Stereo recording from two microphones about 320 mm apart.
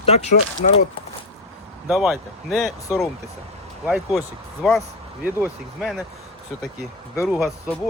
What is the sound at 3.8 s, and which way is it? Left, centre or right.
Speech, centre.